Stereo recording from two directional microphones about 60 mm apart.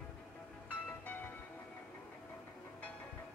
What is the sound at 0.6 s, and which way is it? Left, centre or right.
Music, left.